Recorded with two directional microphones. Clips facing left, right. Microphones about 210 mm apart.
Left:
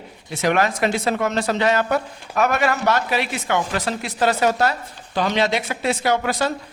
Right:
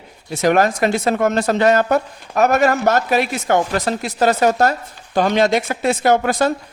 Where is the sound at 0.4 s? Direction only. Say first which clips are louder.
Right 4 dB; 45° right (ahead or behind).